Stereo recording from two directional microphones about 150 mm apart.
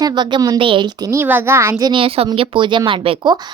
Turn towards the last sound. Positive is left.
turn(degrees=-35)  # may be behind; listen again after turning